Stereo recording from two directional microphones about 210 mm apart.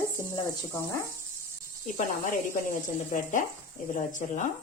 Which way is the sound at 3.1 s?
35° left (ahead or behind).